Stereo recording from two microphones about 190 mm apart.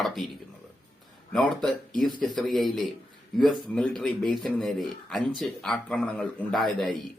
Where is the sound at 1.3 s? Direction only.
Centre (ahead or behind).